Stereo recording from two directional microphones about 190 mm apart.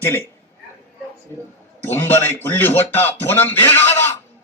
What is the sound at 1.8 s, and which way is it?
Speech, 15° left (ahead or behind).